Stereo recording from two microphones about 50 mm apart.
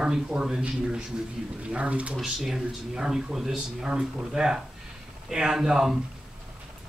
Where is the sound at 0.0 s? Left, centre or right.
Centre.